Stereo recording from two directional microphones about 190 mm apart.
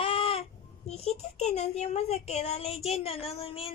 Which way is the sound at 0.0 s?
30° left (ahead or behind).